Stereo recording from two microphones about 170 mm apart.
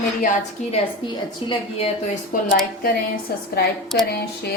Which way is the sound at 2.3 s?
55° left (ahead or behind).